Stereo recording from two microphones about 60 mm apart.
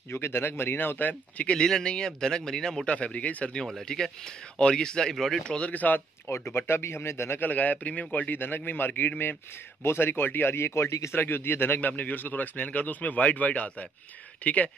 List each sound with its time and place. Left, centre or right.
0.1 s a man's voice: left
1.5 s speech: centre
2.9 s speech: left
3.5 s speech: centre
5.1 s speech: centre
5.4 s speech: centre
5.7 s speech: left
6.5 s speech: left
7.3 s a man's voice: left
11.1 s speech: left